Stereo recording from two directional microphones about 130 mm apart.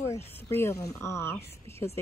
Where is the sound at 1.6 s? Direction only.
20° left (ahead or behind).